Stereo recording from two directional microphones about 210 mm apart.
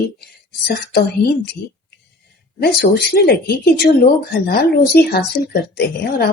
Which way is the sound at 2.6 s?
50° left (ahead or behind).